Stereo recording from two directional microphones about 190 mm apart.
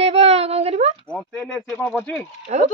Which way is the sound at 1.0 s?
5° left (ahead or behind).